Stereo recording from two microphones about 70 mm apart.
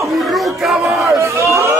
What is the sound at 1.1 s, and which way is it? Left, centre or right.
Crowd, right.